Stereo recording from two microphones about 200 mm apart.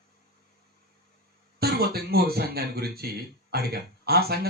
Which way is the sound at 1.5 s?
50° right (ahead or behind).